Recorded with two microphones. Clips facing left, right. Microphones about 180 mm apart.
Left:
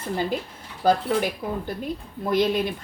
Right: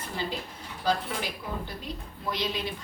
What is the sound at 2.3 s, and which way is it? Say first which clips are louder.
Speech: left 10 dB; 55° left (ahead or behind).